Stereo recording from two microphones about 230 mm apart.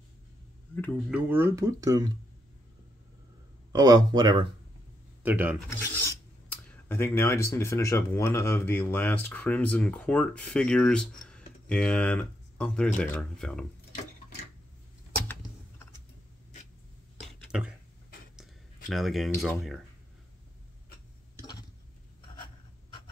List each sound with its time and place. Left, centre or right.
1.1 s speech: centre
3.7 s speech: centre
5.2 s speech: centre
5.7 s filing: centre
17.5 s a sound: centre
21.4 s a sound: centre